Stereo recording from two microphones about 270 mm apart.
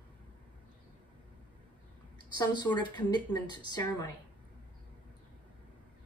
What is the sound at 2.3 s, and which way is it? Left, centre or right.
A woman's voice, centre.